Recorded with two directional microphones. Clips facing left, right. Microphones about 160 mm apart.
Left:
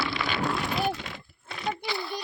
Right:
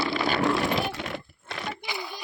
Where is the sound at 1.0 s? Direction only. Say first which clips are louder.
Right 6 dB; 70° right (ahead or behind).